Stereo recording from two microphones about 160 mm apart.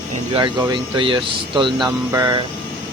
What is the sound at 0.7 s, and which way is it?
Speech, 30° right (ahead or behind).